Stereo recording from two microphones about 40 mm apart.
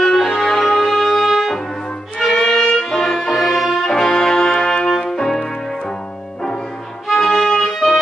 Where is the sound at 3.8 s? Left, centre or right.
Centre.